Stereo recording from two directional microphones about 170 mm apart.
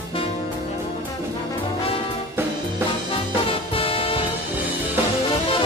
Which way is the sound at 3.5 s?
35° left (ahead or behind).